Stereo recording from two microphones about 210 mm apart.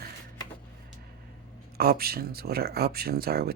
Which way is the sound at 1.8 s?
45° right (ahead or behind).